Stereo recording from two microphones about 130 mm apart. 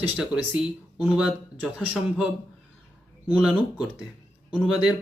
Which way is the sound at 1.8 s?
10° right (ahead or behind).